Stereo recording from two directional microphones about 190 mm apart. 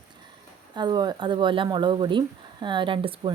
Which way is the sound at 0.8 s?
20° right (ahead or behind).